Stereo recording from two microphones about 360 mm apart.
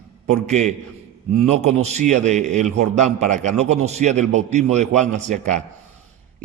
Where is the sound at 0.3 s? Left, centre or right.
Centre.